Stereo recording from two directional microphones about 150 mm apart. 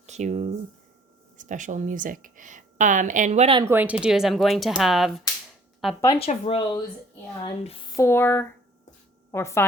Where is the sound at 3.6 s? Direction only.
15° right (ahead or behind).